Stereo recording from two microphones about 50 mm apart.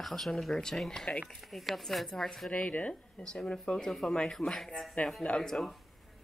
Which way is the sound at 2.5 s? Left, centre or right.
Left.